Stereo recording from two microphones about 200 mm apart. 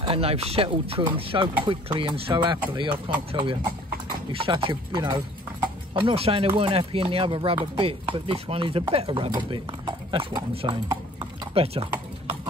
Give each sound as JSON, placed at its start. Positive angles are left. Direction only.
{"t": 0.0, "sound": "speech", "side_deg": -30}